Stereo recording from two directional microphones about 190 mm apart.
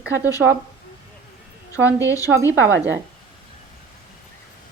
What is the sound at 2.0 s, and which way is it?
Speech, 15° left (ahead or behind).